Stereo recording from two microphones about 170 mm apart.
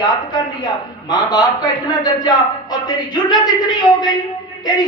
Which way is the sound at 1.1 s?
25° left (ahead or behind).